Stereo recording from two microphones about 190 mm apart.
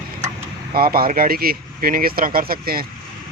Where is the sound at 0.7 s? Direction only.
50° right (ahead or behind).